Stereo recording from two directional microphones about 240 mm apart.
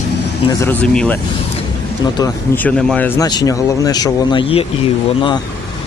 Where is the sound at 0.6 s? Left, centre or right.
Centre.